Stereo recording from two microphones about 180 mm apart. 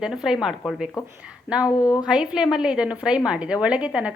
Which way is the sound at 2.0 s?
5° right (ahead or behind).